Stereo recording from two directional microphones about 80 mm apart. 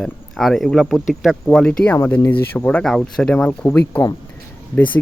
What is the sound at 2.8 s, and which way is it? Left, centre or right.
Speech, centre.